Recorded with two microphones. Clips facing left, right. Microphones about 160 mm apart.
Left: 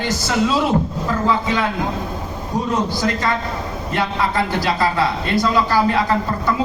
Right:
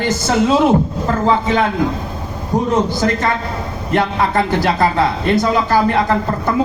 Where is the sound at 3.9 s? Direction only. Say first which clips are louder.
Right 5 dB; 50° right (ahead or behind).